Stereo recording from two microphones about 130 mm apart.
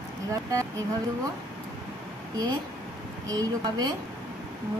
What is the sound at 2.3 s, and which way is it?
A woman's voice, 30° right (ahead or behind).